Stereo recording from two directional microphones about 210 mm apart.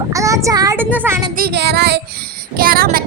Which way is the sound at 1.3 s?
50° right (ahead or behind).